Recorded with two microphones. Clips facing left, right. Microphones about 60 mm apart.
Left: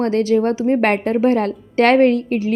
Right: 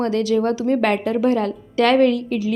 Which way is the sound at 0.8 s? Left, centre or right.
Left.